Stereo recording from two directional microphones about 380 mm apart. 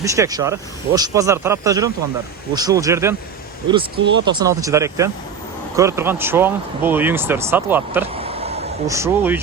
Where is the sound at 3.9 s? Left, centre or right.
Right.